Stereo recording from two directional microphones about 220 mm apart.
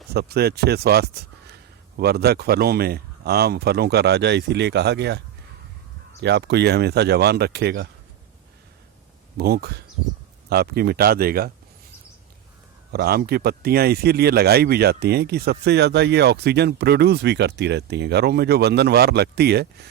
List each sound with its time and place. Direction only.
0.1 s speech: 45° right (ahead or behind)
6.2 s speech: 50° right (ahead or behind)
9.4 s speech: 45° right (ahead or behind)
12.9 s speech: 45° right (ahead or behind)